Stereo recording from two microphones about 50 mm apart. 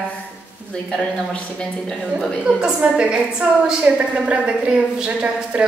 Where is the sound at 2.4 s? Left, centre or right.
Right.